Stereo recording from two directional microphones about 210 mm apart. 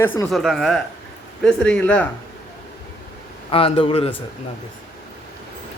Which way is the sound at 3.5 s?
25° left (ahead or behind).